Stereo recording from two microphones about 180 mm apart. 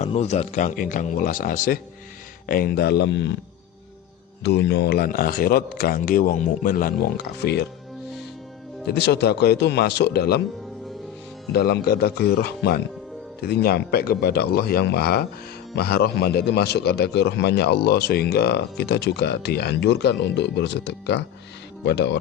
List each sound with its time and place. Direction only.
0.0 s a man's voice: 40° left (ahead or behind); by 3.3 s 85° left
4.4 s a man's voice: 70° left (ahead or behind)
8.9 s a man's voice: 70° left (ahead or behind)
11.5 s a man's voice: 60° left (ahead or behind)